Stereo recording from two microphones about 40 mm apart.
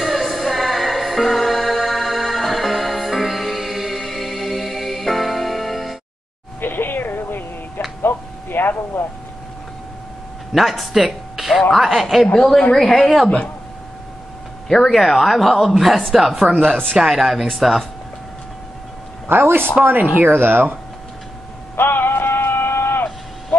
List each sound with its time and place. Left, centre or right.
0.0 s music: centre
6.6 s music: left
8.0 s a sound: left
10.5 s speech: centre
12.4 s a woman's voice: centre
14.7 s speech: centre
16.4 s speech: right
17.0 s speech: centre
19.3 s speech: right
21.7 s a sound: left